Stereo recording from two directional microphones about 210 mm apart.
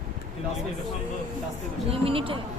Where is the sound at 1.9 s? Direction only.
25° right (ahead or behind).